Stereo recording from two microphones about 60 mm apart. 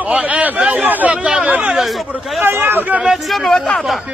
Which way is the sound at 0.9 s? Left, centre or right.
Right.